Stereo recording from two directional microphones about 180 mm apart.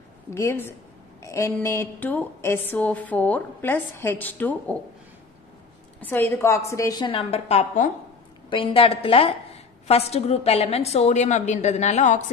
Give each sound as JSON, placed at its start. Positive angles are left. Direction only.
{"t": 0.3, "sound": "a woman's voice", "side_deg": 15}
{"t": 5.9, "sound": "a woman's voice", "side_deg": 10}
{"t": 8.5, "sound": "a woman's voice", "side_deg": 30}